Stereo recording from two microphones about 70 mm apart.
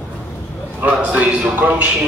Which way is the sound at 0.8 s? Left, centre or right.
Centre.